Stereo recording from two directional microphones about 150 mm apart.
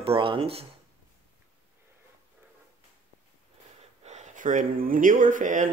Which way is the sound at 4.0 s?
50° right (ahead or behind).